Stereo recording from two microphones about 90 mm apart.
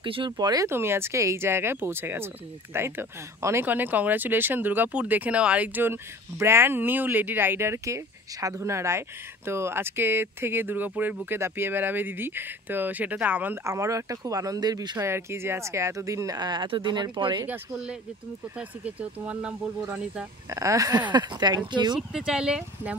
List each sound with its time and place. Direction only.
0.0 s speech: 65° right (ahead or behind); by 0.7 s 50° right (ahead or behind)
0.7 s speech: 25° right (ahead or behind)
13.7 s speech: 35° right (ahead or behind)
15.0 s speech: 30° right (ahead or behind)
16.3 s speech: 50° right (ahead or behind)
18.6 s speech: 15° right (ahead or behind)
20.4 s speech: 35° right (ahead or behind)
21.1 s speech: 55° right (ahead or behind)
22.1 s speech: 10° right (ahead or behind)